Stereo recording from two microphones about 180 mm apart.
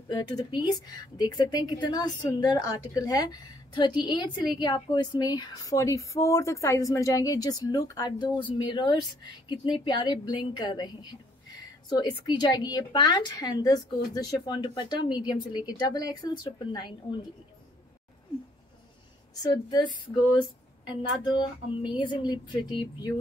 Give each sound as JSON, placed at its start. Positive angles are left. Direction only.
{"t": 0.1, "sound": "speech", "side_deg": 20}
{"t": 19.4, "sound": "speech", "side_deg": 25}
{"t": 20.9, "sound": "speech", "side_deg": 25}